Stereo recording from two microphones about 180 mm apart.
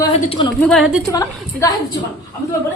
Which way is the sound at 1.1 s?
20° left (ahead or behind).